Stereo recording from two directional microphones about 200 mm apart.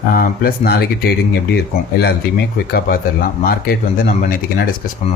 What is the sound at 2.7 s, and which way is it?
Speech, 50° left (ahead or behind).